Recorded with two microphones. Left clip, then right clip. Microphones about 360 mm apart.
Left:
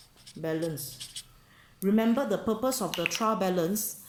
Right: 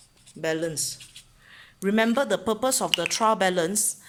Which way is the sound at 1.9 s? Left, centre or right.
Right.